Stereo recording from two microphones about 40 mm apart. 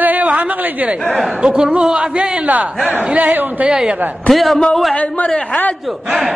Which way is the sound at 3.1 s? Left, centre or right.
Right.